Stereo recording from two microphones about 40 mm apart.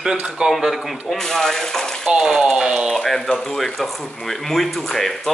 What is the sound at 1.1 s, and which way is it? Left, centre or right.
Speech, centre.